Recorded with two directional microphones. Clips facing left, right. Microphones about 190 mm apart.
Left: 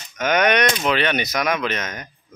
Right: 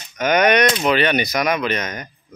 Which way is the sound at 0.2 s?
10° right (ahead or behind).